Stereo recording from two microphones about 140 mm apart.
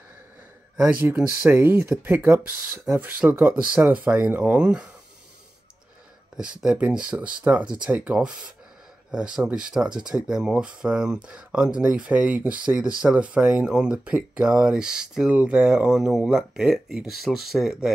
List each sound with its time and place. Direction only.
1.0 s speech: 15° right (ahead or behind)
6.6 s speech: 5° right (ahead or behind)